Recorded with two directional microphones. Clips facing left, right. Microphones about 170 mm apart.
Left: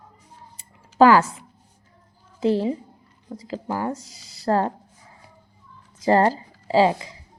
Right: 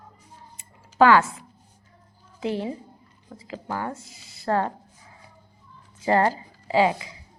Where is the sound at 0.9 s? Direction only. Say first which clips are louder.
Left 2 dB; 35° left (ahead or behind).